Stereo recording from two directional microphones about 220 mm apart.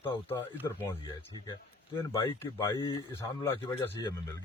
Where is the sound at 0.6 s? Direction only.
10° left (ahead or behind).